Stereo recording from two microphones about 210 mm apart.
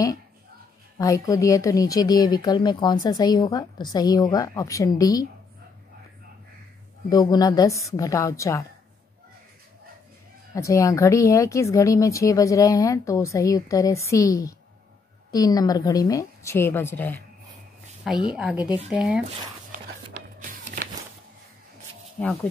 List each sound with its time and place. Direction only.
0.9 s speech: 15° left (ahead or behind)
7.1 s speech: 20° left (ahead or behind)
10.5 s speech: 15° left (ahead or behind)
18.3 s speech: 5° right (ahead or behind)
20.3 s music: 40° right (ahead or behind)
22.2 s speech: 5° left (ahead or behind)